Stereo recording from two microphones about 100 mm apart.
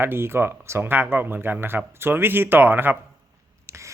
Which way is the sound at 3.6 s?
30° right (ahead or behind).